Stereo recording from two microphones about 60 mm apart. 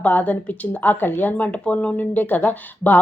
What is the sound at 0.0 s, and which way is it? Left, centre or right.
Speech, left.